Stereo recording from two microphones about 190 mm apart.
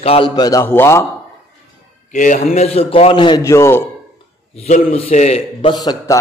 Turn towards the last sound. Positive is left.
turn(degrees=20)  # may be behind; listen again after turning